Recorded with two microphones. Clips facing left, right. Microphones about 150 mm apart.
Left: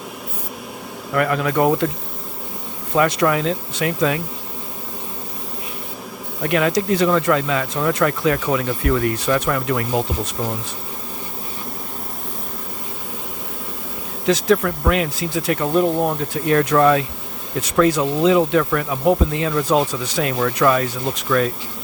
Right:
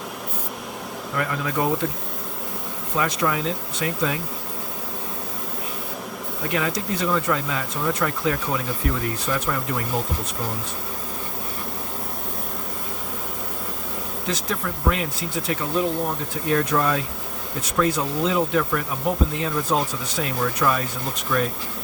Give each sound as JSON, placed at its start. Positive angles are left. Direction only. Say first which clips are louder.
{"t": 1.1, "sound": "speech", "louder": "left 7 dB", "side_deg": 70}
{"t": 2.9, "sound": "speech", "louder": "left 7 dB", "side_deg": 70}
{"t": 6.5, "sound": "speech", "louder": "left 8 dB", "side_deg": 70}
{"t": 14.3, "sound": "speech", "louder": "left 12 dB", "side_deg": 85}
{"t": 16.3, "sound": "speech", "louder": "left 4 dB", "side_deg": 70}
{"t": 17.6, "sound": "speech", "louder": "left 6 dB", "side_deg": 90}